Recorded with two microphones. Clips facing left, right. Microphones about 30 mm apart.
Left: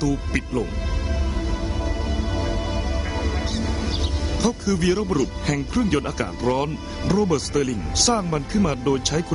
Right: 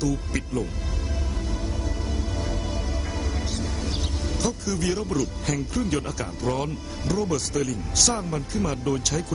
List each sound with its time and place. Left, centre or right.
0.0 s speech: left
3.2 s music: left
4.4 s speech: left